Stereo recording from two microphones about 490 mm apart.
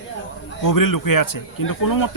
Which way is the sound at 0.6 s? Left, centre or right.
Left.